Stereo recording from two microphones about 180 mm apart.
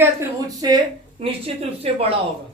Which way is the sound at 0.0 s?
20° right (ahead or behind).